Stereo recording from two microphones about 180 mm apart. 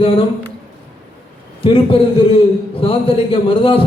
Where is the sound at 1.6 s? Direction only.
30° left (ahead or behind).